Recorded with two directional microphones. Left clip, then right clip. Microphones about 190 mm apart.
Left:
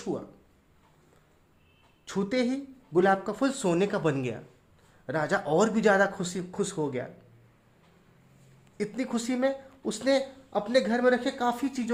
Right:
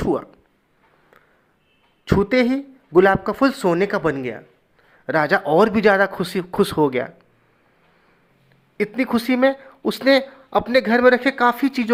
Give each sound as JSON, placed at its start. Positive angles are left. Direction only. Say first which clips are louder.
{"t": 0.0, "sound": "speech", "louder": "right 12 dB", "side_deg": -30}
{"t": 2.0, "sound": "speech", "louder": "right 11 dB", "side_deg": -20}
{"t": 8.8, "sound": "speech", "louder": "right 11 dB", "side_deg": -20}